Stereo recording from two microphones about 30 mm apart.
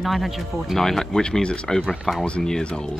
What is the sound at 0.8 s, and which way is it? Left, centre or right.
Speech, centre.